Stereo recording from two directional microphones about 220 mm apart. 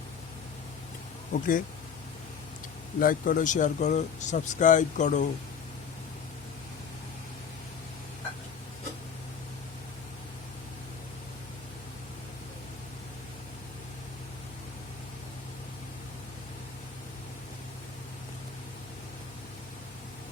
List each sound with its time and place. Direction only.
1.3 s speech: 40° left (ahead or behind)
3.0 s speech: 40° left (ahead or behind)